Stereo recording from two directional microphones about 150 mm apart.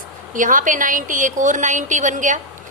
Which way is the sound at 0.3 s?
60° right (ahead or behind).